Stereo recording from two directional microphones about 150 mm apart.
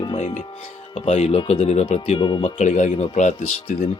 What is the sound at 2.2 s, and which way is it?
Speech, 30° left (ahead or behind).